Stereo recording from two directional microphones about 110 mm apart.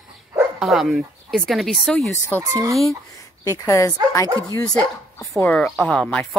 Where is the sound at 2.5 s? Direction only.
30° right (ahead or behind).